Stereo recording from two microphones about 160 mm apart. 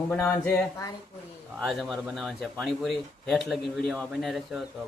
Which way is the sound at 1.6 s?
Centre (ahead or behind).